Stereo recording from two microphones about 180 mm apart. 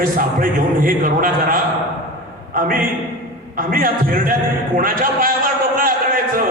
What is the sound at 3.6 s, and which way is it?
A man's voice, 50° right (ahead or behind).